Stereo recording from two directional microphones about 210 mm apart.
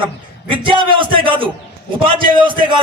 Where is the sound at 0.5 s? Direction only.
25° right (ahead or behind).